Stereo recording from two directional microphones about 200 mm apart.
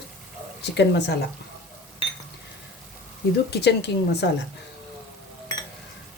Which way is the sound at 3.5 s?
55° left (ahead or behind).